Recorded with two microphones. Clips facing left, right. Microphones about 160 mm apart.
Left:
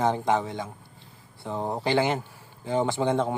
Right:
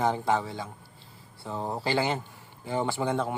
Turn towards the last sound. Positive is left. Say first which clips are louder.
# left 3 dB
turn(degrees=20)  # may be behind; listen again after turning